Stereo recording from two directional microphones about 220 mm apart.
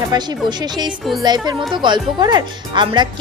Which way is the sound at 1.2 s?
20° right (ahead or behind).